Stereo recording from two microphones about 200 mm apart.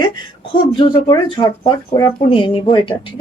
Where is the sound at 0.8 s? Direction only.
20° left (ahead or behind).